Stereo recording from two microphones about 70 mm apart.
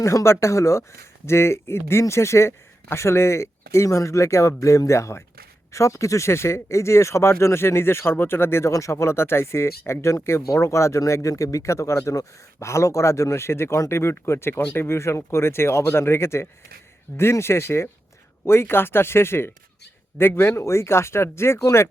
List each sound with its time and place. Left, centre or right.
0.0 s speech: left
8.7 s speech: left